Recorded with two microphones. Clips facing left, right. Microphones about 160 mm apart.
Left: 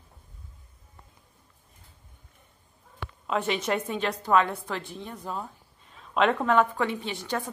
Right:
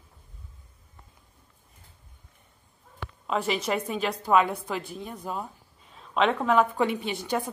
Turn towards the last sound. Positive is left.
turn(degrees=-15)  # may be behind; listen again after turning